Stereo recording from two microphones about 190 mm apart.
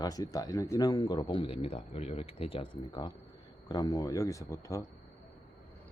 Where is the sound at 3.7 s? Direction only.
20° left (ahead or behind).